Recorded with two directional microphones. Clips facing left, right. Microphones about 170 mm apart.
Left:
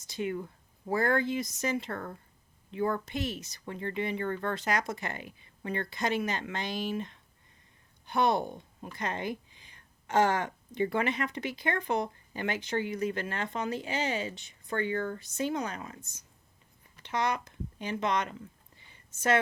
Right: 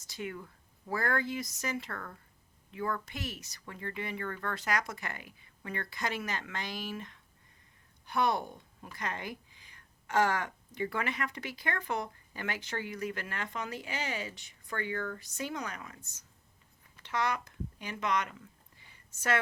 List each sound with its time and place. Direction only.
0.0 s speech: 20° left (ahead or behind)